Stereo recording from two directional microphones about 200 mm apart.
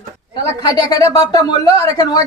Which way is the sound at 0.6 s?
20° left (ahead or behind).